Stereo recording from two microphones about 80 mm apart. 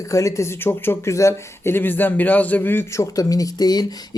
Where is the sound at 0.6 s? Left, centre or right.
Left.